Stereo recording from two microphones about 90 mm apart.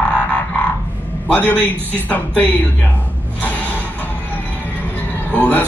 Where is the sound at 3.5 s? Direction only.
20° right (ahead or behind).